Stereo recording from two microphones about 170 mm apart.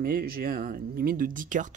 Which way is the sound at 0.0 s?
60° right (ahead or behind).